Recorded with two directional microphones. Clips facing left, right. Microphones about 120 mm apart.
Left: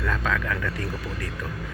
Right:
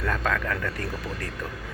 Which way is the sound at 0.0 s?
45° right (ahead or behind).